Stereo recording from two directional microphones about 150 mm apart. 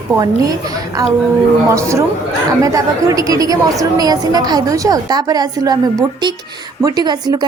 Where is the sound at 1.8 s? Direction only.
20° right (ahead or behind).